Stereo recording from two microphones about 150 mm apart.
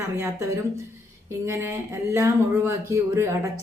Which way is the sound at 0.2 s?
20° right (ahead or behind).